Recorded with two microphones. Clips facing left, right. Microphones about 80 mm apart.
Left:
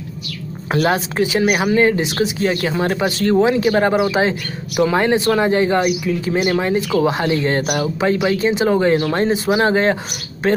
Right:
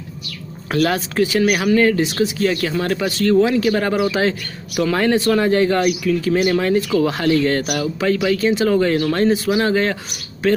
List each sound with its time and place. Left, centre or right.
0.7 s speech: left